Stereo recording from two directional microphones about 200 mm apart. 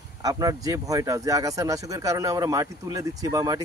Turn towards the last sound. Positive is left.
turn(degrees=-20)  # may be behind; listen again after turning